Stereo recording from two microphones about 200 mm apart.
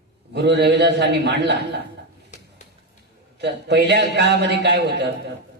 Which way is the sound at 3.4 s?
60° right (ahead or behind).